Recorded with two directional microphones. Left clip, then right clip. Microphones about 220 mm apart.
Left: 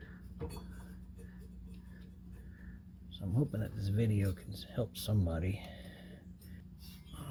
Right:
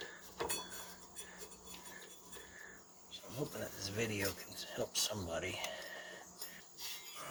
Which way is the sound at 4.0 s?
35° left (ahead or behind).